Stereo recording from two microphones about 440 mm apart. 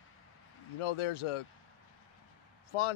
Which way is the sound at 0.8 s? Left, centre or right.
Left.